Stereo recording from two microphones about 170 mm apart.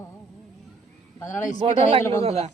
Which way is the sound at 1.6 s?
30° right (ahead or behind).